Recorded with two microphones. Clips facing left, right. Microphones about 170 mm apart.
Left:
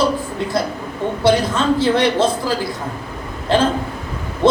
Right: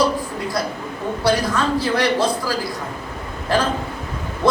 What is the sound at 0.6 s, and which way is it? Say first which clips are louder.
A man's voice: left 5 dB; 25° left (ahead or behind).